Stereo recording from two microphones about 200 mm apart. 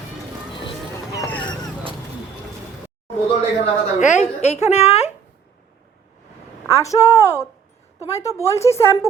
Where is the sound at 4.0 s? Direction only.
35° left (ahead or behind).